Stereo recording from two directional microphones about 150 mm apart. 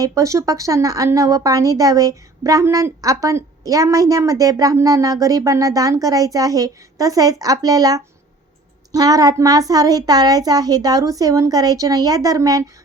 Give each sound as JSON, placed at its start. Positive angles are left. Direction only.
{"t": 0.0, "sound": "speech", "side_deg": -20}